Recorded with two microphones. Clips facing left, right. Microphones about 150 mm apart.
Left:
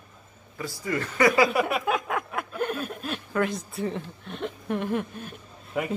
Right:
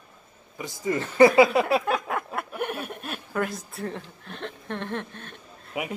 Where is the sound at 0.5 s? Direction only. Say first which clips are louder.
Right 2 dB; 20° right (ahead or behind).